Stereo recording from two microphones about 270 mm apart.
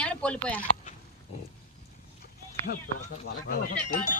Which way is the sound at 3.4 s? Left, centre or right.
Left.